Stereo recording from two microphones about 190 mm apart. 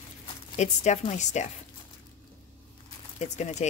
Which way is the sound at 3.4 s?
40° left (ahead or behind).